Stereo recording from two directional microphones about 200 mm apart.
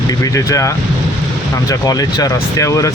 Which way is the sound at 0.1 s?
15° left (ahead or behind).